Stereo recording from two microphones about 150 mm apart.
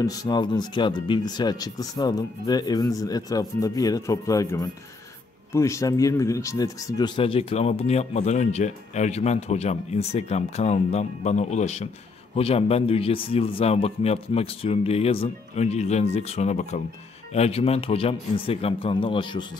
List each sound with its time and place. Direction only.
0.0 s speech: 25° left (ahead or behind)